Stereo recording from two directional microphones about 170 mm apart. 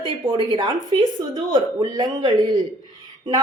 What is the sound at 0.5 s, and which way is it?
A woman's voice, 25° right (ahead or behind).